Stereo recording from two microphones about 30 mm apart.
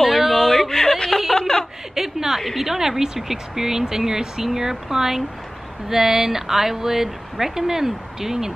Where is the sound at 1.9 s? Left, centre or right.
Centre.